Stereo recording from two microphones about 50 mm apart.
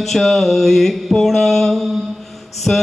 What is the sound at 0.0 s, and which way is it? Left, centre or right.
Mantra, centre.